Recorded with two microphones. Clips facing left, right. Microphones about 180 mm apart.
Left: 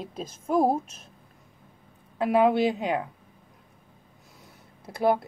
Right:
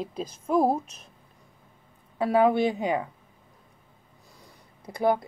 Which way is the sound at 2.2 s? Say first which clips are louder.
Even; 20° left (ahead or behind).